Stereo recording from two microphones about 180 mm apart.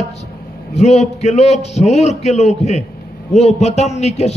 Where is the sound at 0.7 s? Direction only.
35° left (ahead or behind).